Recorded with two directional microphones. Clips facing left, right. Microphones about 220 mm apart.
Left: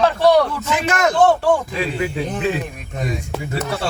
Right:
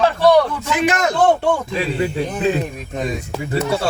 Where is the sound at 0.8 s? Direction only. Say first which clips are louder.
Even; 20° right (ahead or behind).